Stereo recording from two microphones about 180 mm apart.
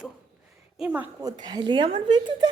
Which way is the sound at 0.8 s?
10° right (ahead or behind).